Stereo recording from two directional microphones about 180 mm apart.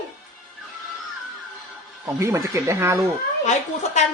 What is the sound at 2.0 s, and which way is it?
Speech, 15° right (ahead or behind).